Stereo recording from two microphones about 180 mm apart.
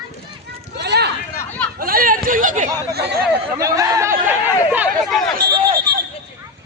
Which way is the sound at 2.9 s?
60° right (ahead or behind).